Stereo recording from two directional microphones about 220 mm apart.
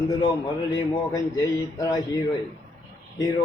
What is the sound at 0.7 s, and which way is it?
Speech, 15° left (ahead or behind).